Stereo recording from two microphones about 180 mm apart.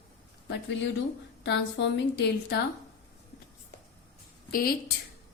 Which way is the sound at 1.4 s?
70° left (ahead or behind).